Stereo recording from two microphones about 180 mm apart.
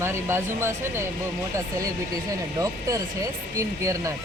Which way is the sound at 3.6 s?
15° right (ahead or behind).